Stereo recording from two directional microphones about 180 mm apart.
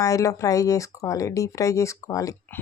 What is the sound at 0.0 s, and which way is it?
Speech, 20° left (ahead or behind).